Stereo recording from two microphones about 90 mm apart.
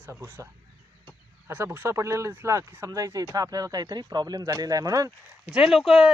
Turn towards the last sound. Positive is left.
turn(degrees=0)  # may be behind; listen again after turning